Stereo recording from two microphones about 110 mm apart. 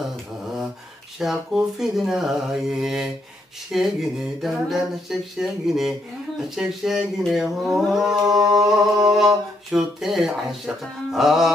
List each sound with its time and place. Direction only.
1.2 s mantra: 5° right (ahead or behind)
8.3 s singing: 35° right (ahead or behind)
9.2 s mantra: 5° right (ahead or behind)